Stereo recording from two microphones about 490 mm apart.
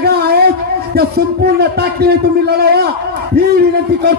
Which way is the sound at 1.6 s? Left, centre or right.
Centre.